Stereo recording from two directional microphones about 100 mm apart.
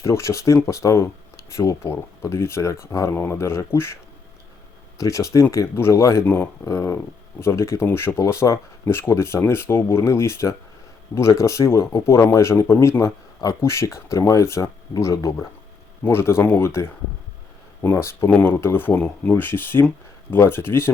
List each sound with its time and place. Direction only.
0.0 s speech: 30° left (ahead or behind)
4.9 s speech: 30° left (ahead or behind)
6.2 s speech: 20° left (ahead or behind)
18.3 s speech: 15° left (ahead or behind)